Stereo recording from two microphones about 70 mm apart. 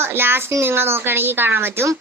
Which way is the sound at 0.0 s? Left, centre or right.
Right.